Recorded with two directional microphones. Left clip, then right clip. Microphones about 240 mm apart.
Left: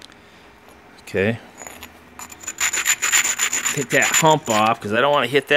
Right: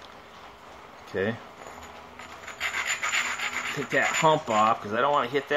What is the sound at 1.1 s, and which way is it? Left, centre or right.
Rub, left.